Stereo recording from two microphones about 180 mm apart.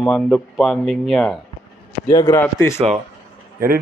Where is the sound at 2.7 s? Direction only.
35° right (ahead or behind).